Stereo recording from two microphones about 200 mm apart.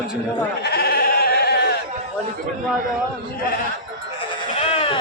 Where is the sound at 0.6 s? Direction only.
55° left (ahead or behind).